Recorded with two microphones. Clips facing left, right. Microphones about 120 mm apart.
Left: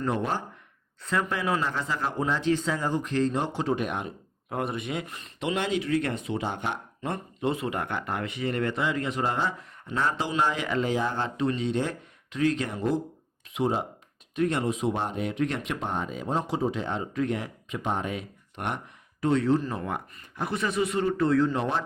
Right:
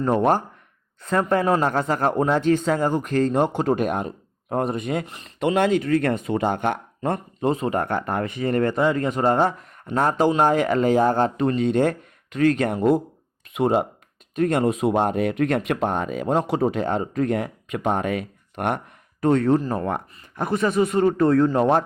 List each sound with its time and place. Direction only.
0.0 s speech: 50° right (ahead or behind)
5.0 s speech: 25° right (ahead or behind)
5.4 s speech: 50° right (ahead or behind)